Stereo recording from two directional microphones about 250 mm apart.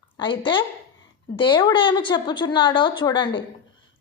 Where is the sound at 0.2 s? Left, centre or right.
Centre.